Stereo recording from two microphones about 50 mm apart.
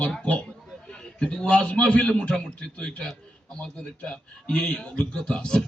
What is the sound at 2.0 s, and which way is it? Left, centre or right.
A man's voice, centre.